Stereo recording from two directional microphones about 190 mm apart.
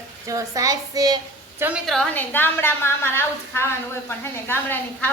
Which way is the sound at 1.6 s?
Centre (ahead or behind).